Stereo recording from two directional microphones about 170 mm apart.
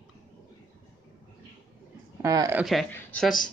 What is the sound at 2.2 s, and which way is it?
Speech, 20° right (ahead or behind).